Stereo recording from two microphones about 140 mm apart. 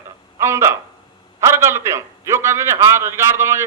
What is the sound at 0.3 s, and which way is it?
A man's voice, 20° right (ahead or behind).